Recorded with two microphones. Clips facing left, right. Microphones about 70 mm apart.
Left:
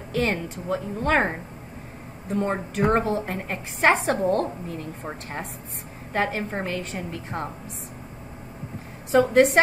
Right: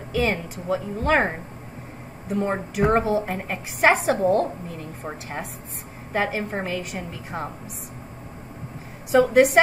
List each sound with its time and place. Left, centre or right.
0.2 s a woman's voice: centre
6.1 s a woman's voice: centre
9.3 s a woman's voice: centre